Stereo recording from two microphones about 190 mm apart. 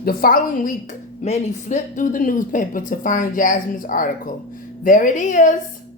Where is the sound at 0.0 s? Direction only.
50° left (ahead or behind).